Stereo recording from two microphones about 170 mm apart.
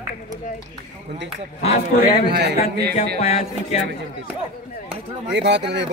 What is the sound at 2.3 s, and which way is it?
Speech, 75° right (ahead or behind).